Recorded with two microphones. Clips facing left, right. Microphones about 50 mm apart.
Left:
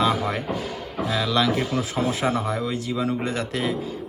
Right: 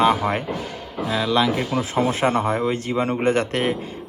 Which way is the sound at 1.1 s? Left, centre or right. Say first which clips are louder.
Right 3 dB; centre.